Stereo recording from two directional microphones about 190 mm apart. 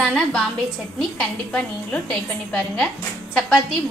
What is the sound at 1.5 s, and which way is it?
A woman's voice, 5° left (ahead or behind).